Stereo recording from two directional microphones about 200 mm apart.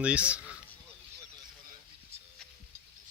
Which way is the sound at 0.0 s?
5° right (ahead or behind).